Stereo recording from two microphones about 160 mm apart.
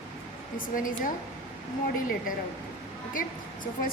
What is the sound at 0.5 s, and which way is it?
Speech, 60° left (ahead or behind).